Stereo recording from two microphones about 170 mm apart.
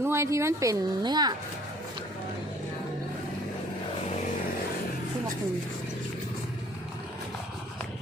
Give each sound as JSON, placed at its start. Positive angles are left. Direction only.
{"t": 0.0, "sound": "a woman's voice", "side_deg": -15}